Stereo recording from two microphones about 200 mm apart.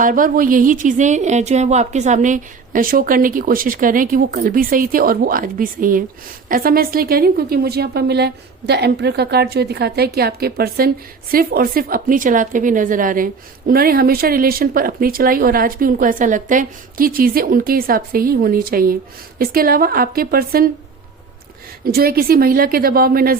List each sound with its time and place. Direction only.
0.0 s a woman's voice: 45° right (ahead or behind)
21.9 s a woman's voice: 50° right (ahead or behind)